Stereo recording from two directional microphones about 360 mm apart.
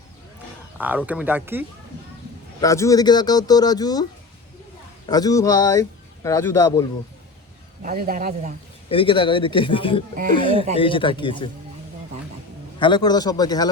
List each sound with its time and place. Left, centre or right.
0.8 s speech: centre
2.6 s speech: centre
5.0 s speech: centre
7.9 s a man's voice: right
8.9 s speech: centre
12.8 s speech: centre